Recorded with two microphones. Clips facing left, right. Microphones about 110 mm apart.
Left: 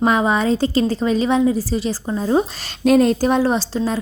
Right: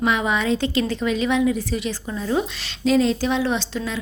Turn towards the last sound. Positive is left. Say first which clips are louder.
# left 5 dB
turn(degrees=35)  # may be behind; listen again after turning